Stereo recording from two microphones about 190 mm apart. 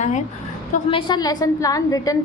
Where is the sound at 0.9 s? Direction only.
20° left (ahead or behind).